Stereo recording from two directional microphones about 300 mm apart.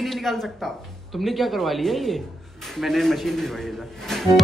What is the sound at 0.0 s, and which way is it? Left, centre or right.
Speech, centre.